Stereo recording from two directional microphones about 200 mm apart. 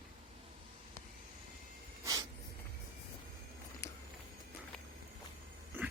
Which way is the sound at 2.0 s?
20° right (ahead or behind).